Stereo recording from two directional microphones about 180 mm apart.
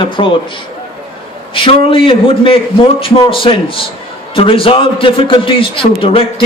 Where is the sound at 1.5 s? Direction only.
30° left (ahead or behind).